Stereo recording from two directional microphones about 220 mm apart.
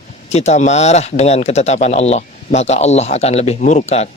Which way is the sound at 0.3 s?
30° left (ahead or behind).